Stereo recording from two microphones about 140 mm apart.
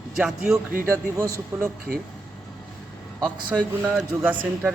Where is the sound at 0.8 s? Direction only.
20° right (ahead or behind).